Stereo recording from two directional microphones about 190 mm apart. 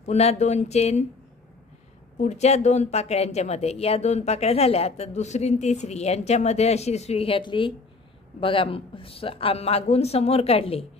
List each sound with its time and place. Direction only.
0.0 s speech: 35° left (ahead or behind)
2.2 s speech: 35° left (ahead or behind)